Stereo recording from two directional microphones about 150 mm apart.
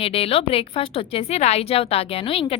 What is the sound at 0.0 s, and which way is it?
A woman's voice, 40° left (ahead or behind).